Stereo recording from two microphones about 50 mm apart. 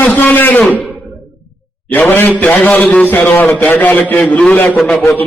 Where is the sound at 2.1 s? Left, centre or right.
Left.